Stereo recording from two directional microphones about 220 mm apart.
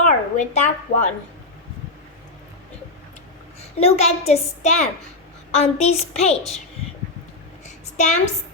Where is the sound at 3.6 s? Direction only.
30° left (ahead or behind).